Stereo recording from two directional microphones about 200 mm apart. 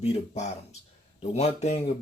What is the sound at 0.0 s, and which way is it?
Speech, 35° left (ahead or behind).